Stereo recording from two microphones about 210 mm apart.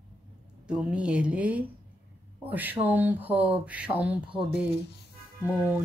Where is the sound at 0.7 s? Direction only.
5° right (ahead or behind).